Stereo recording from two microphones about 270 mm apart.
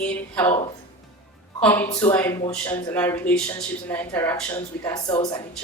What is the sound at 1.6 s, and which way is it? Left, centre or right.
Speech, centre.